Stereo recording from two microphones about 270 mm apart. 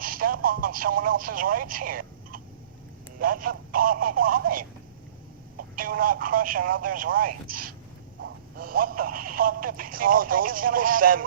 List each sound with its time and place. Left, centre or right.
0.0 s speech: right
7.4 s speech: right
8.5 s speech: right